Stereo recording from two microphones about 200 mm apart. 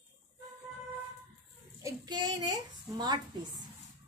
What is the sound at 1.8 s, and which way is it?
A child's voice, 20° right (ahead or behind).